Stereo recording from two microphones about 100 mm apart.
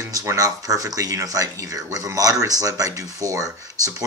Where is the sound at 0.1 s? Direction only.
30° right (ahead or behind).